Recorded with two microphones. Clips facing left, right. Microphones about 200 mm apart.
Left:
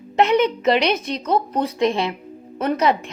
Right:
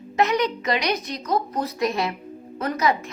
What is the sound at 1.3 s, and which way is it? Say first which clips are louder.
Speech: left 4 dB; 30° left (ahead or behind).